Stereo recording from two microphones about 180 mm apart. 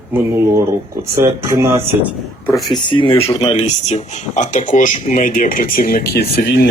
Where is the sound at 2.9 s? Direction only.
30° left (ahead or behind).